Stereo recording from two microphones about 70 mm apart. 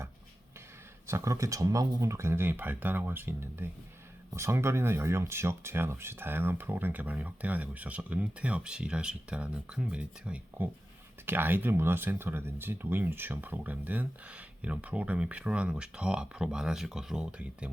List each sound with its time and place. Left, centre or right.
1.0 s speech: right
2.0 s speech: right
4.3 s speech: right; by 10.7 s centre
11.3 s speech: right